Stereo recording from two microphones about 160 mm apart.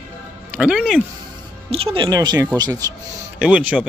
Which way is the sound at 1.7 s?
35° right (ahead or behind).